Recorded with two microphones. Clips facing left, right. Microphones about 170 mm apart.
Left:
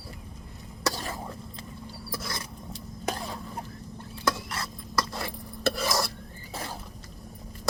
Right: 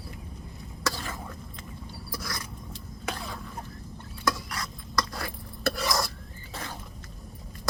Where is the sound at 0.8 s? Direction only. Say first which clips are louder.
Left 2 dB; 35° left (ahead or behind).